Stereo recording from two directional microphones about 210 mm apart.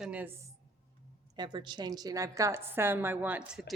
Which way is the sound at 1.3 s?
20° right (ahead or behind).